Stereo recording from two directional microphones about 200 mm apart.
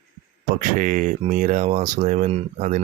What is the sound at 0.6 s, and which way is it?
Speech, 40° right (ahead or behind).